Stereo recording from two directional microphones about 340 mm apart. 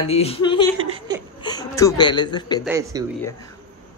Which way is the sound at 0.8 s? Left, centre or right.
Centre.